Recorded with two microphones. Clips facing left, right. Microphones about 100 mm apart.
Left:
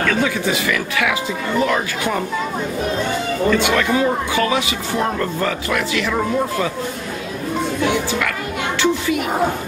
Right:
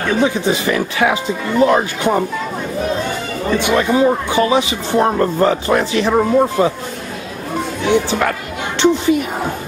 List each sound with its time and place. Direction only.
0.0 s speech: 25° right (ahead or behind)
3.4 s speech: 20° right (ahead or behind)
7.9 s speech: 30° right (ahead or behind)